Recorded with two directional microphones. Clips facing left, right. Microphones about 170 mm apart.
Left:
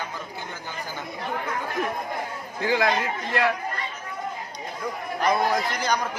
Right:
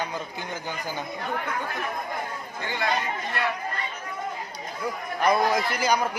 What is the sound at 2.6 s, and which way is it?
Speech, 90° left.